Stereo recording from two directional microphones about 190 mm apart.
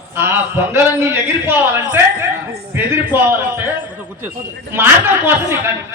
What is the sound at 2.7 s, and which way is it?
Speech, 10° right (ahead or behind).